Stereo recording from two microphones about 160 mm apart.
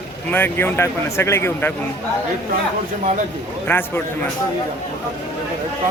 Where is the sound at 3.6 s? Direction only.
15° left (ahead or behind).